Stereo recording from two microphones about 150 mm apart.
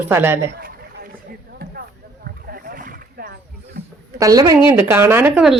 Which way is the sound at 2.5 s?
75° right (ahead or behind).